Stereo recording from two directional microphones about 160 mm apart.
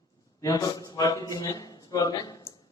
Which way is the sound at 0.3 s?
20° left (ahead or behind).